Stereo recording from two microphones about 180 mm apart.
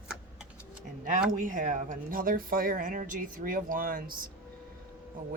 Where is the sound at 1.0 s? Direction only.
45° right (ahead or behind).